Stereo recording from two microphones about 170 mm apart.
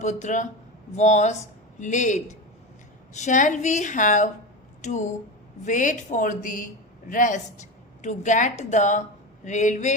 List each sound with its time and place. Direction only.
0.0 s a woman's voice: 45° left (ahead or behind)